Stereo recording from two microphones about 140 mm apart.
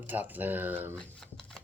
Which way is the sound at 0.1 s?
10° right (ahead or behind).